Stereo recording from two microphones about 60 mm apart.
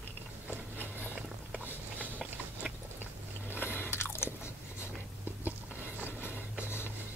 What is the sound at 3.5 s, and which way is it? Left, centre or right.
Biting, left.